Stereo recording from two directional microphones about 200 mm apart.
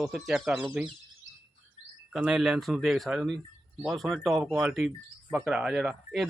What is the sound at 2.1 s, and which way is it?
Speech, 5° right (ahead or behind).